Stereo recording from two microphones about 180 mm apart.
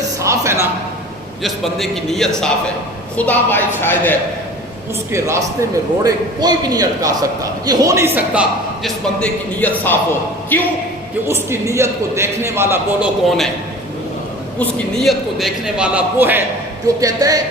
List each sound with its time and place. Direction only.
0.2 s speech: 15° right (ahead or behind)
1.4 s a man's voice: centre (ahead or behind)
5.1 s a man's voice: 15° right (ahead or behind)
9.2 s a woman's voice: 10° left (ahead or behind)
11.3 s a man's voice: 15° right (ahead or behind)
14.6 s a man's voice: centre (ahead or behind); by 17.4 s 20° right (ahead or behind)